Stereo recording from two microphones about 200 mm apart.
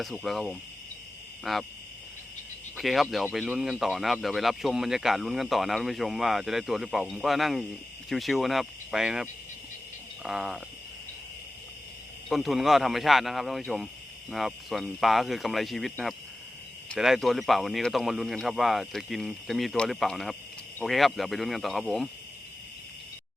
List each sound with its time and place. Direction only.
0.0 s speech: centre (ahead or behind)
2.7 s speech: centre (ahead or behind)
12.3 s speech: centre (ahead or behind)